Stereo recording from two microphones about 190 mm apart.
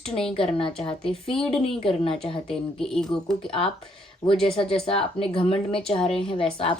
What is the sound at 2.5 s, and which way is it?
Speech, centre (ahead or behind).